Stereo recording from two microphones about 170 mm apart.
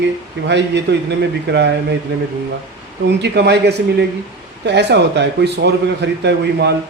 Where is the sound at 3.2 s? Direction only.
80° right.